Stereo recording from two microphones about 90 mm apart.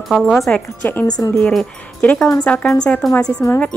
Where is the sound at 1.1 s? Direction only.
45° left (ahead or behind).